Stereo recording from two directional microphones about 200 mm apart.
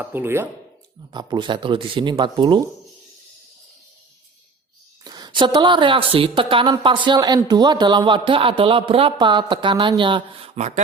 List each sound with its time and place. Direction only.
0.0 s speech: 10° right (ahead or behind)
1.1 s speech: 20° right (ahead or behind)
5.0 s speech: 20° right (ahead or behind)